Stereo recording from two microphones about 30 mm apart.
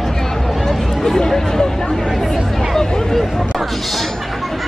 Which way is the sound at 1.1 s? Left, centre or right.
Centre.